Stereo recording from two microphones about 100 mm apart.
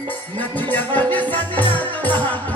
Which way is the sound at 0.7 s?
20° left (ahead or behind).